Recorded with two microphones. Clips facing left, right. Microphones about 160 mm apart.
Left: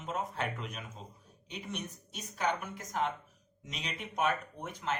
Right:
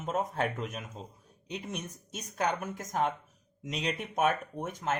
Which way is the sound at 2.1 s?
45° right (ahead or behind).